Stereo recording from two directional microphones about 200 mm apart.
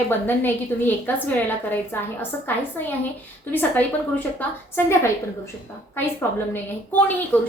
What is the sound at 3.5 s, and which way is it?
A woman's voice, 10° left (ahead or behind).